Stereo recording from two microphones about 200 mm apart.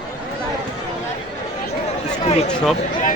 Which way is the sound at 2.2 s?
30° left (ahead or behind).